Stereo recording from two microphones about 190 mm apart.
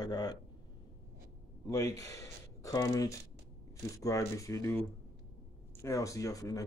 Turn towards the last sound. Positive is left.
turn(degrees=20)  # may be behind; listen again after turning